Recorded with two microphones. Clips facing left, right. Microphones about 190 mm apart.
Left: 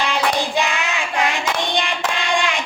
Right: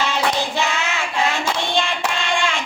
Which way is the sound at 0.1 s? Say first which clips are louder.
Left 1 dB; 15° left (ahead or behind).